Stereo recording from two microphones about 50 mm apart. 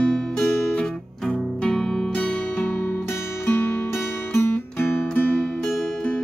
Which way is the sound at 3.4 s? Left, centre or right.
Left.